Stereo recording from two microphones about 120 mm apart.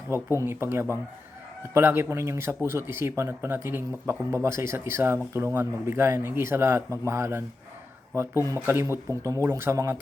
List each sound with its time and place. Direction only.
0.1 s speech: 20° right (ahead or behind)